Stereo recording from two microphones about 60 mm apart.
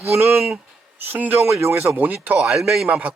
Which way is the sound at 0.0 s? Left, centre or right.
Right.